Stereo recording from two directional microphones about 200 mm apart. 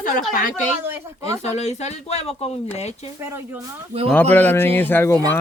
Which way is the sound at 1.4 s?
35° left (ahead or behind).